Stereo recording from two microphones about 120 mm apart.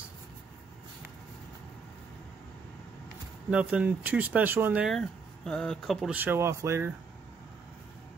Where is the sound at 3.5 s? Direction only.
10° right (ahead or behind).